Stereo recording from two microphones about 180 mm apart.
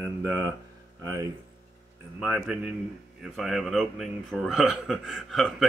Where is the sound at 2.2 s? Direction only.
5° right (ahead or behind).